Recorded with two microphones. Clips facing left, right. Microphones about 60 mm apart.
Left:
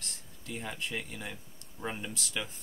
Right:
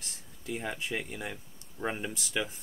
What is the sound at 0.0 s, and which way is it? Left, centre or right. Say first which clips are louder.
Speech: right 3 dB; centre.